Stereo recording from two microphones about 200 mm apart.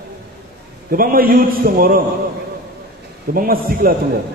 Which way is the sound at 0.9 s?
45° right (ahead or behind).